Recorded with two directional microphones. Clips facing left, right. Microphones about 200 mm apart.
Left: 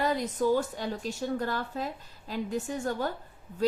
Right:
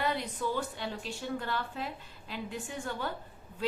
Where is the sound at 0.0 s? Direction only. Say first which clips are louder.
Left 6 dB; 40° left (ahead or behind).